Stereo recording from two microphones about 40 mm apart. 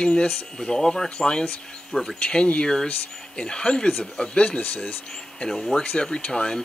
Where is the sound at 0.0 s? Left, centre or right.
Left.